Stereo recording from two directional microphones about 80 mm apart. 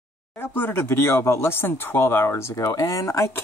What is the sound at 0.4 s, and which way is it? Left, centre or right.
Speech, left.